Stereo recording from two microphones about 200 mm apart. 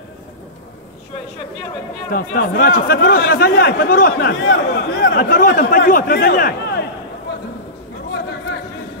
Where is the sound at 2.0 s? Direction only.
45° left (ahead or behind).